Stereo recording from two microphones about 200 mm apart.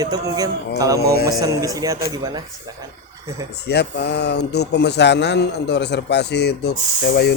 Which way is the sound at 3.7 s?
55° left (ahead or behind).